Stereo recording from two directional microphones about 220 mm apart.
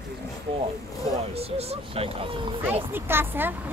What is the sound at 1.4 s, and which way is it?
Speech, 25° right (ahead or behind).